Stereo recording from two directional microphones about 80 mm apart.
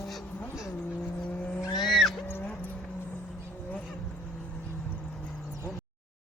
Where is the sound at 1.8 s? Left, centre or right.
Centre.